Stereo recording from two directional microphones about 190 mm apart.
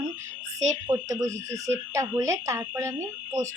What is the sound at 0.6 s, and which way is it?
Speech, 15° right (ahead or behind).